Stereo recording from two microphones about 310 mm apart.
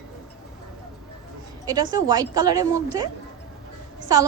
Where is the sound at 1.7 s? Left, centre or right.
Centre.